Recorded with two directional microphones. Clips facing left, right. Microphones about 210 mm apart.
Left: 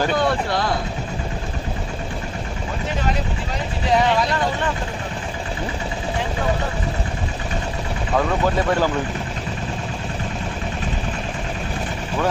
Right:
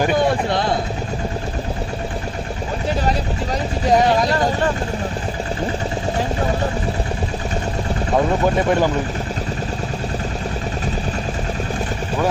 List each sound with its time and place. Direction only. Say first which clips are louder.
3.8 s vehicle: right 3 dB; 40° right (ahead or behind)